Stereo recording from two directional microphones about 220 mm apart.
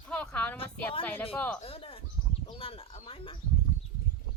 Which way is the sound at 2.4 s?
25° left (ahead or behind).